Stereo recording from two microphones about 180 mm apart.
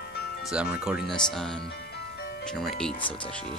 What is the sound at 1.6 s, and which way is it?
Music, 65° left (ahead or behind).